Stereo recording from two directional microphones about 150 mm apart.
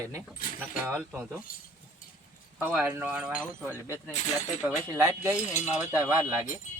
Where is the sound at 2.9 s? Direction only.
10° right (ahead or behind).